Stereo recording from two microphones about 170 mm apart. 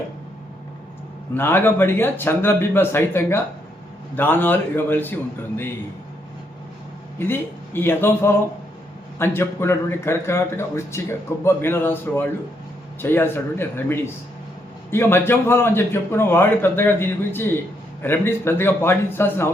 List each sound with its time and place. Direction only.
1.3 s a man's voice: 10° left (ahead or behind)
7.2 s a man's voice: 15° left (ahead or behind)